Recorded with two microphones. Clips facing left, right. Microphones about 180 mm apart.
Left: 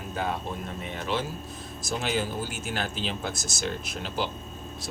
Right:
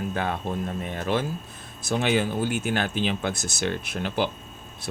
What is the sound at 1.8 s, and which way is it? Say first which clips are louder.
Speech: right 5 dB; 65° right (ahead or behind).